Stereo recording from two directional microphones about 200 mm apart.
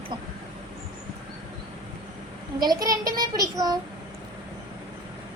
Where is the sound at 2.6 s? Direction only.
20° right (ahead or behind).